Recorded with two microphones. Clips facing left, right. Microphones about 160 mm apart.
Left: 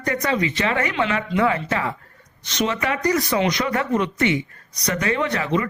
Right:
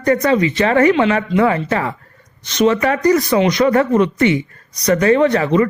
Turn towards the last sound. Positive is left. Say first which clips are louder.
# right 9 dB
turn(degrees=-40)  # may be behind; listen again after turning